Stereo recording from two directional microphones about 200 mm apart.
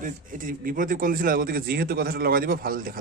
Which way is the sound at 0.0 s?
40° right (ahead or behind).